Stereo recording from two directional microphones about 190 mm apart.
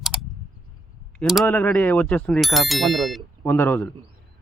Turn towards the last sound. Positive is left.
turn(degrees=10)  # may be behind; listen again after turning